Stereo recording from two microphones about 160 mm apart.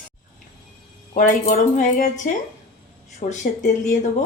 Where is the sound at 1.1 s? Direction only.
55° left (ahead or behind).